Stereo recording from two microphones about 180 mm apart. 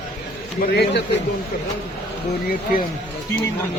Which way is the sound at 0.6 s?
65° left (ahead or behind).